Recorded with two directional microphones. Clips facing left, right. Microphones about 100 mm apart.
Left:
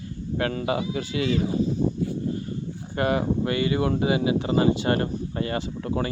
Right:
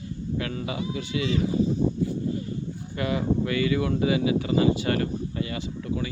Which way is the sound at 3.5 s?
30° left (ahead or behind).